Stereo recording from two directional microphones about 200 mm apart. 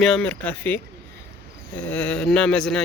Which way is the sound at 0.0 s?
5° left (ahead or behind).